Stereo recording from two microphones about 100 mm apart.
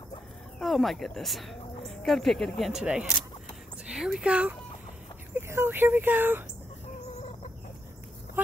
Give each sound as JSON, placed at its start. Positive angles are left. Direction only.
{"t": 0.6, "sound": "speech", "side_deg": 0}
{"t": 2.8, "sound": "speech", "side_deg": -10}
{"t": 3.8, "sound": "a sound", "side_deg": -5}
{"t": 5.3, "sound": "speech", "side_deg": -20}